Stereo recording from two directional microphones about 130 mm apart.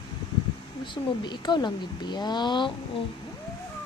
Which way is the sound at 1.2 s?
35° left (ahead or behind).